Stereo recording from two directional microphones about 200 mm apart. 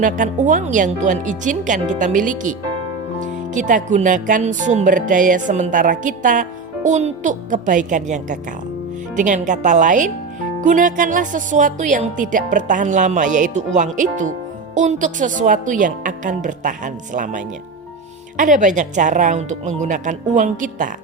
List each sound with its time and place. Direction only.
0.0 s speech: 40° right (ahead or behind)